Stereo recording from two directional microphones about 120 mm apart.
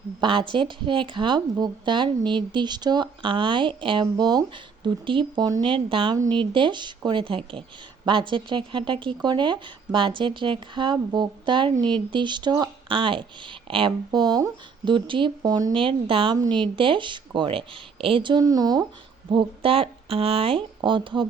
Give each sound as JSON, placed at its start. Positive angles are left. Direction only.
{"t": 0.2, "sound": "speech", "side_deg": -45}
{"t": 15.7, "sound": "speech", "side_deg": -45}
{"t": 19.3, "sound": "speech", "side_deg": -45}